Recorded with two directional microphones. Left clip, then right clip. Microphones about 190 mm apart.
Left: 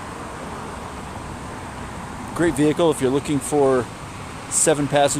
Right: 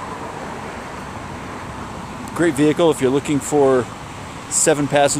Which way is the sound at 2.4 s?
Centre (ahead or behind).